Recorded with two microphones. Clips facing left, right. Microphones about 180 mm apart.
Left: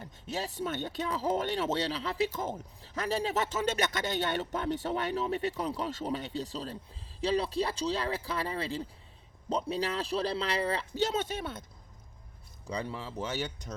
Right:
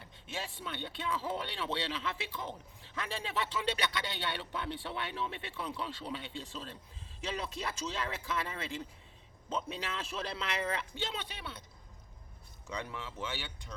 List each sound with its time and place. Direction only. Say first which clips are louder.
0.0 s speech: left 6 dB; 40° left (ahead or behind)
12.6 s speech: left 5 dB; 35° left (ahead or behind)